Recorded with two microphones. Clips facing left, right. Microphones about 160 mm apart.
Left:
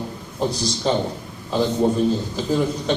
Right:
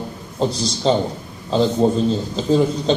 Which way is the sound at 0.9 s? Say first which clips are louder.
Right 4 dB; 25° right (ahead or behind).